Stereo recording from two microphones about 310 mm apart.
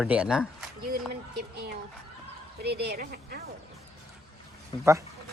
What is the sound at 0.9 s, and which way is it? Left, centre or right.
Speech, right.